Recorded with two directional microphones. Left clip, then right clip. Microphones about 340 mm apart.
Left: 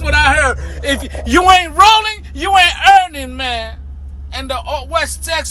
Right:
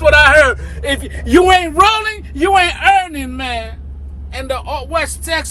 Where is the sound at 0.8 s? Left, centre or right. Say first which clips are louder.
Left 1 dB; left.